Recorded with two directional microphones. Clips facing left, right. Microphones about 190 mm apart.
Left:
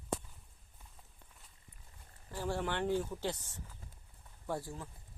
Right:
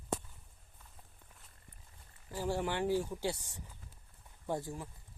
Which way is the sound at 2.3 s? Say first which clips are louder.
Right 2 dB; 10° right (ahead or behind).